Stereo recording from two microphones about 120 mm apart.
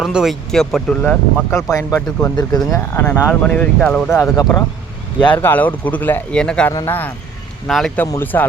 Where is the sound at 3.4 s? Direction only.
10° left (ahead or behind).